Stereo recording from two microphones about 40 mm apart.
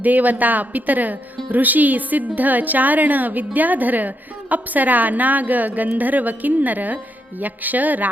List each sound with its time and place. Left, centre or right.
0.0 s a woman's voice: right